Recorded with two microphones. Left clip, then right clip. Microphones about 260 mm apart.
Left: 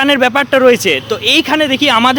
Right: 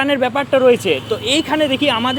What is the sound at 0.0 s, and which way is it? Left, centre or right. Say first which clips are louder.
Speech: left 6 dB; left.